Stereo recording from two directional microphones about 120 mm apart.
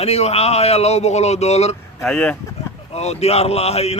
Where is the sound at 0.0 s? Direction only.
60° left (ahead or behind).